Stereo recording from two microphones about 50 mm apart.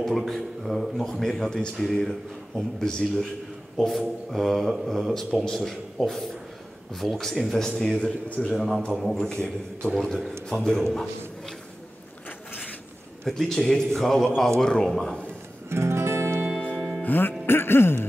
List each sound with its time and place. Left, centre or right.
0.0 s a man's voice: centre
3.7 s speech: centre
8.0 s a man's voice: left
8.5 s speech: centre
9.2 s a man's voice: centre
9.9 s a man's voice: centre
13.2 s a man's voice: centre
15.7 s music: right
16.7 s music: centre
17.0 s music: left
17.5 s music: left